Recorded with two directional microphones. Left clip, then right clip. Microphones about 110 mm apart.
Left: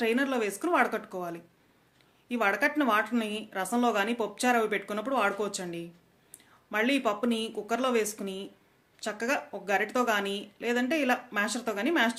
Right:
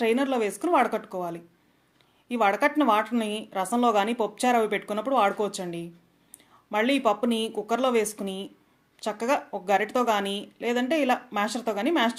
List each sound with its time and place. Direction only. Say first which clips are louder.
0.0 s speech: right 4 dB; 45° right (ahead or behind)